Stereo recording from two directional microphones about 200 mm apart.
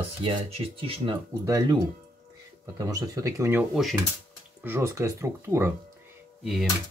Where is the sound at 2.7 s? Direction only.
15° right (ahead or behind); by 4.0 s centre (ahead or behind).